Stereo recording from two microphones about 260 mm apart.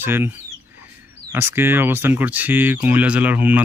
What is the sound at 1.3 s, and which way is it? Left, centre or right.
Speech, centre.